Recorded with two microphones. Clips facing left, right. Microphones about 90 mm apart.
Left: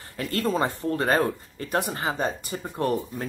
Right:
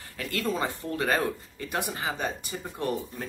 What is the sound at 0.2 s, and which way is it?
Speech, 35° left (ahead or behind).